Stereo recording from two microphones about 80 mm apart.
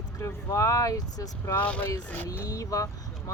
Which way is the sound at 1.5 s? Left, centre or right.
Centre.